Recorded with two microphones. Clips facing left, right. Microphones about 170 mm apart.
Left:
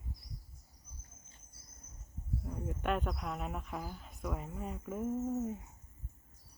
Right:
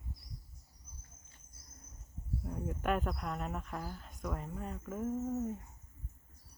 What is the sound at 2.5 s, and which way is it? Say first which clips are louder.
Speech: right 1 dB; centre (ahead or behind).